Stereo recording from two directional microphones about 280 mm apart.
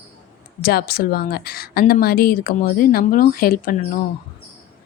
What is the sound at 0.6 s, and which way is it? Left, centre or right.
A woman's voice, left.